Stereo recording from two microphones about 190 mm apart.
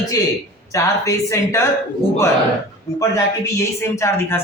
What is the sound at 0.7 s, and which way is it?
Speech, 15° left (ahead or behind).